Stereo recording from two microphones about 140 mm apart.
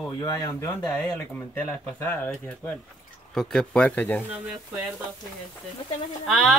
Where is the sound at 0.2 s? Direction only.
30° left (ahead or behind).